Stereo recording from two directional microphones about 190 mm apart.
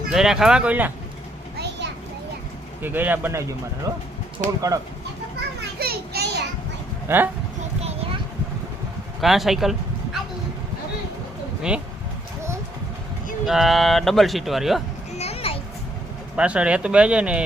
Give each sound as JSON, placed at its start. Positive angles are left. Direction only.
{"t": 0.1, "sound": "speech", "side_deg": 0}
{"t": 1.5, "sound": "vehicle", "side_deg": -60}
{"t": 2.8, "sound": "speech", "side_deg": -10}
{"t": 5.8, "sound": "a sound", "side_deg": -55}
{"t": 7.1, "sound": "speech", "side_deg": -10}
{"t": 9.2, "sound": "speech", "side_deg": 0}
{"t": 11.7, "sound": "speech", "side_deg": -5}
{"t": 13.4, "sound": "speech", "side_deg": 0}
{"t": 15.2, "sound": "a sound", "side_deg": 30}
{"t": 16.3, "sound": "speech", "side_deg": -5}